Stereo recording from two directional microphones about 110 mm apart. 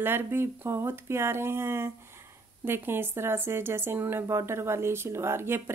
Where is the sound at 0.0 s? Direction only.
20° right (ahead or behind).